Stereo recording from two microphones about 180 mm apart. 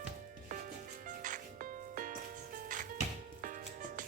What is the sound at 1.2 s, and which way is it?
Music, 45° right (ahead or behind).